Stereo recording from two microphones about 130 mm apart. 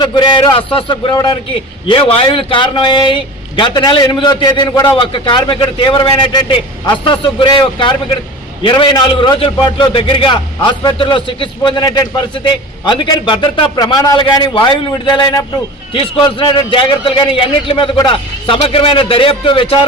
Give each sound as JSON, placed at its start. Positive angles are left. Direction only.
{"t": 0.0, "sound": "a man's voice", "side_deg": 35}
{"t": 11.8, "sound": "a man's voice", "side_deg": 30}